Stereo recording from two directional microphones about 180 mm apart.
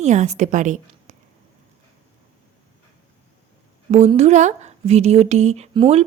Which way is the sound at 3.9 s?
40° right (ahead or behind).